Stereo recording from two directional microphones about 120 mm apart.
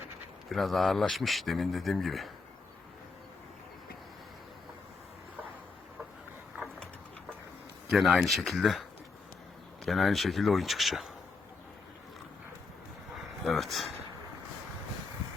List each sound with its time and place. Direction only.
0.4 s speech: centre (ahead or behind)
6.6 s a sound: 15° right (ahead or behind)
7.9 s speech: centre (ahead or behind)
9.8 s speech: centre (ahead or behind)
13.4 s speech: centre (ahead or behind)